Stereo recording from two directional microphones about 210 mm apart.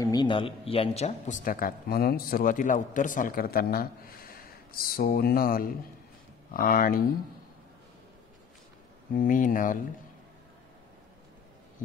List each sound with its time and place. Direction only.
0.0 s speech: 20° left (ahead or behind); by 7.1 s 45° left (ahead or behind)
9.1 s speech: 40° left (ahead or behind)